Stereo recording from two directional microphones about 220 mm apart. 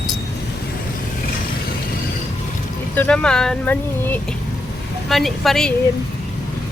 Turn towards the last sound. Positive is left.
turn(degrees=0)  # may be behind; listen again after turning